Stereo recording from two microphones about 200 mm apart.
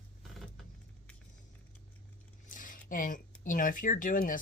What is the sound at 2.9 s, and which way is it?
Speech, 40° left (ahead or behind).